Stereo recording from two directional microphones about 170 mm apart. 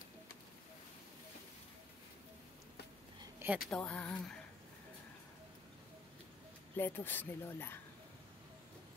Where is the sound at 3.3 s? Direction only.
10° right (ahead or behind).